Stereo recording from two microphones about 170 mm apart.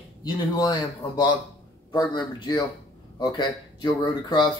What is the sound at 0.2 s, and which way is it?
Speech, 25° left (ahead or behind).